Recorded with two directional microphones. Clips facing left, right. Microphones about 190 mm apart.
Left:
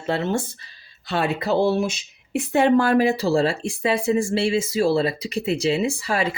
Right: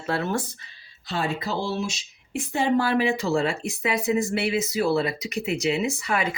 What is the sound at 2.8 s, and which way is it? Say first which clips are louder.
Speech: left 4 dB; 40° left (ahead or behind).